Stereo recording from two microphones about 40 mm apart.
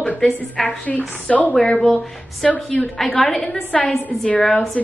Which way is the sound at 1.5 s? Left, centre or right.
Left.